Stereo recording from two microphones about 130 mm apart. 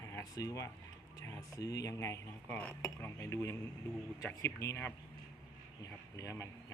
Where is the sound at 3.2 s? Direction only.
25° left (ahead or behind).